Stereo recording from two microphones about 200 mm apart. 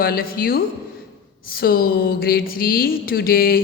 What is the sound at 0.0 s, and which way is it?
Speech, 45° left (ahead or behind).